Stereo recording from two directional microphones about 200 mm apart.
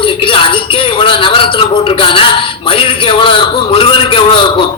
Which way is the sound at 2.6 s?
25° left (ahead or behind).